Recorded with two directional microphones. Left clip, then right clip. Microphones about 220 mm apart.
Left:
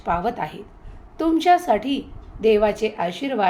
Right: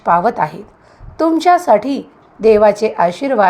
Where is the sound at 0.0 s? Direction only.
25° right (ahead or behind).